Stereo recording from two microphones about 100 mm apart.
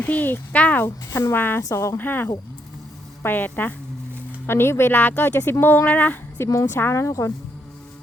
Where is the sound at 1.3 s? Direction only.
20° left (ahead or behind).